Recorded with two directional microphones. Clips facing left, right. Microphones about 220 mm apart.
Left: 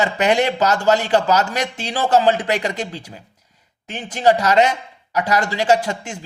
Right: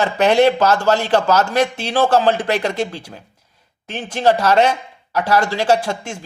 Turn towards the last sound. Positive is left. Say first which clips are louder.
# even
turn(degrees=15)  # may be behind; listen again after turning